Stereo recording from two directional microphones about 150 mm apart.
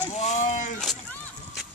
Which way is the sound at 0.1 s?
45° left (ahead or behind).